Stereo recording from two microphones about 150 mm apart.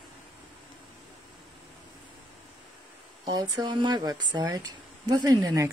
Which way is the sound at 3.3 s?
30° right (ahead or behind).